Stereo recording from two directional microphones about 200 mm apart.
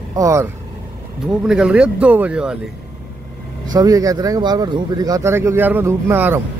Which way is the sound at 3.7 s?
15° right (ahead or behind).